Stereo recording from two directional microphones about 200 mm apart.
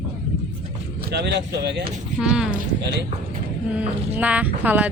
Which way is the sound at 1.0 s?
50° right (ahead or behind).